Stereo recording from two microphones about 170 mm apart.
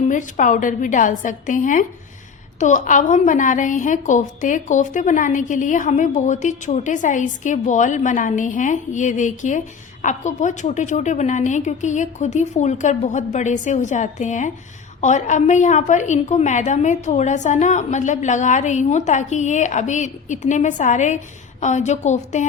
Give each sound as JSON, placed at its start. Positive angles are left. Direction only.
{"t": 0.1, "sound": "a woman's voice", "side_deg": 50}